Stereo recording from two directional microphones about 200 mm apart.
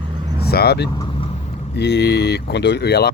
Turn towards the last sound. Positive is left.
turn(degrees=55)  # may be behind; listen again after turning